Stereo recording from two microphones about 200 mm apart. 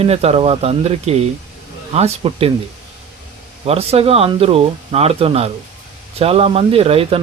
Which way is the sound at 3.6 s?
30° right (ahead or behind).